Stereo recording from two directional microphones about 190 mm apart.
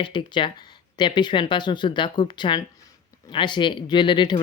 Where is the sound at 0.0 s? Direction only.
25° left (ahead or behind).